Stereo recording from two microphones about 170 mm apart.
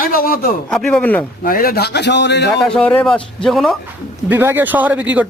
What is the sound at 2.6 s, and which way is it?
Speech, 5° left (ahead or behind).